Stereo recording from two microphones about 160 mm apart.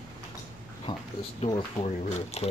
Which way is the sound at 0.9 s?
30° left (ahead or behind).